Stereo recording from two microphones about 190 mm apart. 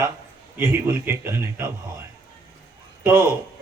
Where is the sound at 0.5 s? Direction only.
10° right (ahead or behind).